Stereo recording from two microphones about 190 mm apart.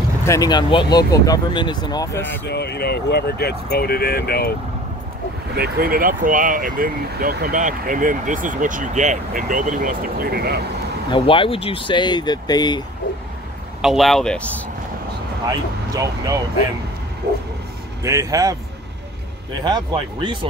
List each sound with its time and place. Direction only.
0.2 s speech: 15° left (ahead or behind)
2.4 s speech: 60° left (ahead or behind)
5.6 s speech: 50° right (ahead or behind)
11.1 s speech: 25° left (ahead or behind)
13.7 s speech: centre (ahead or behind)
15.9 s speech: 20° right (ahead or behind)
18.0 s speech: 15° right (ahead or behind)
19.6 s speech: 20° right (ahead or behind)